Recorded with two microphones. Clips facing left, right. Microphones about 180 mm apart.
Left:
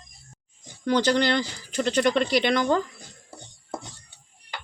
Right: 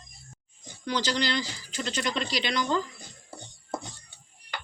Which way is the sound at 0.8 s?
55° left (ahead or behind).